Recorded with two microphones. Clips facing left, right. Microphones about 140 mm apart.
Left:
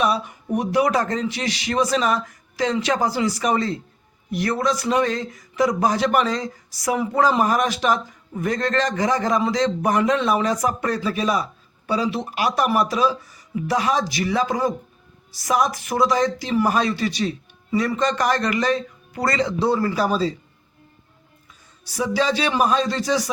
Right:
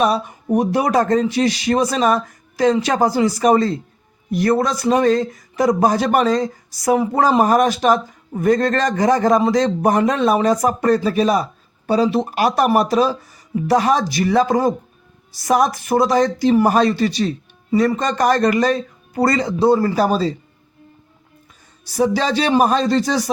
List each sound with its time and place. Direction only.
0.0 s speech: 45° right (ahead or behind)
21.9 s speech: 45° right (ahead or behind)